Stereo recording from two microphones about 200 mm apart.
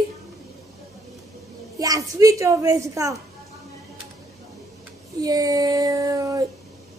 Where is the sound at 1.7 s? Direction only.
15° right (ahead or behind).